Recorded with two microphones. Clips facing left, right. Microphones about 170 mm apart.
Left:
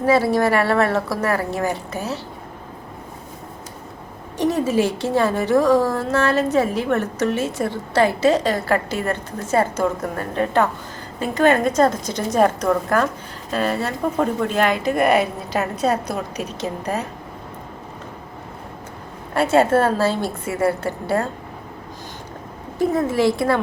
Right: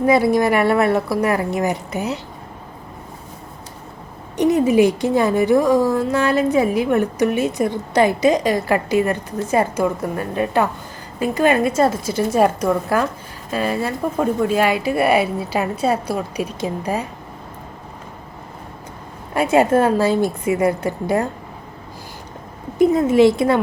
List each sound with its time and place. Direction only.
0.0 s a woman's voice: 15° right (ahead or behind)
4.4 s a woman's voice: 15° right (ahead or behind)
19.3 s a woman's voice: 15° right (ahead or behind)
22.8 s speech: 20° right (ahead or behind)